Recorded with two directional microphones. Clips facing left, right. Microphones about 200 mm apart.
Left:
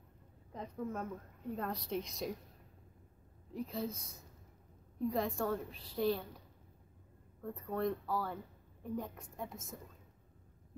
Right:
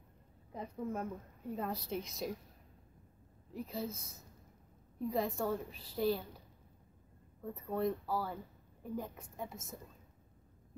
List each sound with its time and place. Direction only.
0.5 s a woman's voice: 10° right (ahead or behind)
3.5 s a woman's voice: 5° right (ahead or behind)
7.4 s a woman's voice: 5° right (ahead or behind)